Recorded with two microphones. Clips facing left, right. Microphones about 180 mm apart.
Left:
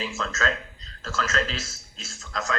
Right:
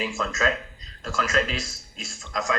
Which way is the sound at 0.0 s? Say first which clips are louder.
Right 3 dB; 15° right (ahead or behind).